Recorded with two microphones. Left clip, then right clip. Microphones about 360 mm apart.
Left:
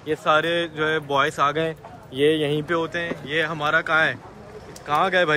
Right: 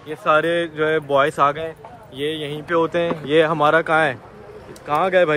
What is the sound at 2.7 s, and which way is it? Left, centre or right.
Speech, centre.